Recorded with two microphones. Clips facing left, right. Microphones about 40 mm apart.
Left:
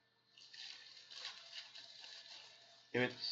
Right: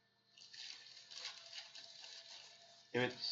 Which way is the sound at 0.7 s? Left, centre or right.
Left.